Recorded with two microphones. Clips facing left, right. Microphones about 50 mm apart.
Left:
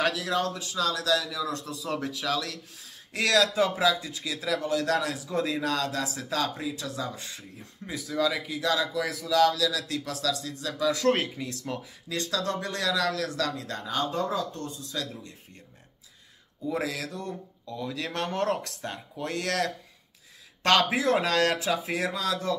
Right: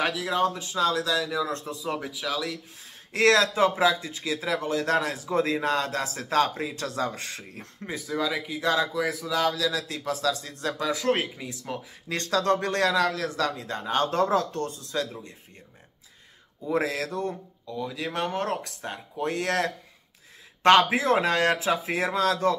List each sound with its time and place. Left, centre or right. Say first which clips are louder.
0.0 s speech: right 2 dB; centre
1.8 s speech: even; centre
3.1 s a man's voice: right 3 dB; right
6.8 s speech: right 5 dB; right
8.1 s speech: left 1 dB; centre
8.6 s a man's voice: right 2 dB; right
11.1 s speech: left 1 dB; centre
12.1 s a man's voice: right 5 dB; right
13.9 s speech: right 5 dB; right
16.7 s a man's voice: right 6 dB; right
17.6 s speech: right 2 dB; centre; by 22.6 s right